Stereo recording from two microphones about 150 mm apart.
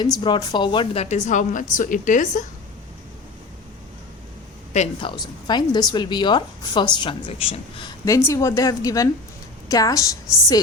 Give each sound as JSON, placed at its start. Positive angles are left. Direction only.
{"t": 0.2, "sound": "a woman's voice", "side_deg": 30}
{"t": 1.0, "sound": "a woman's voice", "side_deg": 55}
{"t": 4.9, "sound": "a woman's voice", "side_deg": 30}
{"t": 8.0, "sound": "a woman's voice", "side_deg": 20}